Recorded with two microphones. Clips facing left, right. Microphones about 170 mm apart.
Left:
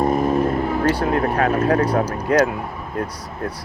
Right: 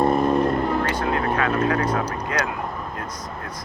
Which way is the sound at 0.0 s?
5° left (ahead or behind).